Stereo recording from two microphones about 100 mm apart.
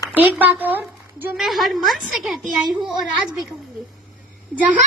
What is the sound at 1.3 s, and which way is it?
A woman's voice, centre (ahead or behind).